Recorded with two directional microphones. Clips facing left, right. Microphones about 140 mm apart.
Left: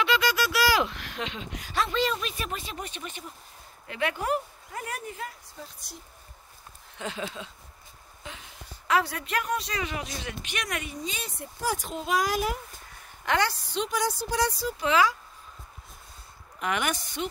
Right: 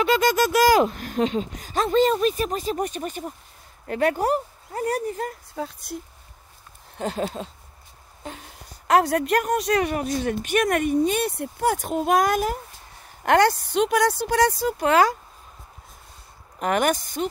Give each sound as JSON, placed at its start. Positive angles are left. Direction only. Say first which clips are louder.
{"t": 0.0, "sound": "a woman's voice", "louder": "right 6 dB", "side_deg": -45}
{"t": 5.6, "sound": "speech", "louder": "right 14 dB", "side_deg": -60}
{"t": 7.0, "sound": "a woman's voice", "louder": "right 8 dB", "side_deg": -40}
{"t": 16.5, "sound": "a woman's voice", "louder": "right 7 dB", "side_deg": -45}